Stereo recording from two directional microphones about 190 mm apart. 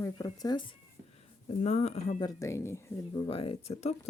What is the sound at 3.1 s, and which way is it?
Speech, 30° left (ahead or behind).